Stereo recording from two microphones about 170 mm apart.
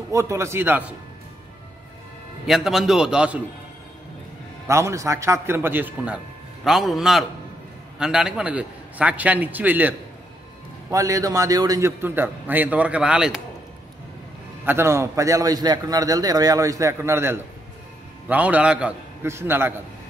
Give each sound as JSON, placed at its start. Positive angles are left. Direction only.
{"t": 0.1, "sound": "a man's voice", "side_deg": -15}
{"t": 2.4, "sound": "a man's voice", "side_deg": 0}
{"t": 4.6, "sound": "a man's voice", "side_deg": -15}
{"t": 14.6, "sound": "a man's voice", "side_deg": -15}